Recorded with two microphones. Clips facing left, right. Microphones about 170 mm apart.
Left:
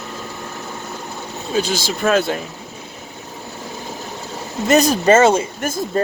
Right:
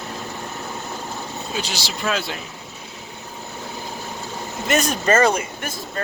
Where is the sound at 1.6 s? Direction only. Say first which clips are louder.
Left 10 dB; 50° left (ahead or behind).